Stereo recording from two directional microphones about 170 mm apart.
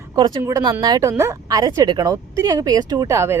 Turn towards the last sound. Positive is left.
turn(degrees=-15)  # may be behind; listen again after turning